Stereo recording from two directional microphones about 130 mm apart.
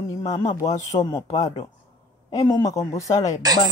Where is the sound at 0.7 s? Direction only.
25° left (ahead or behind).